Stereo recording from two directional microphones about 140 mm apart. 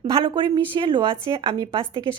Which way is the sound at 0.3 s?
35° right (ahead or behind).